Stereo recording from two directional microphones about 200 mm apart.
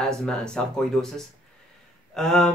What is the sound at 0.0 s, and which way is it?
Speech, 5° left (ahead or behind).